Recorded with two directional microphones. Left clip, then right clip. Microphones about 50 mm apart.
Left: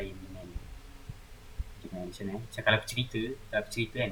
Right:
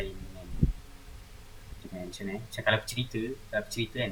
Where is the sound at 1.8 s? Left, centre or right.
Right.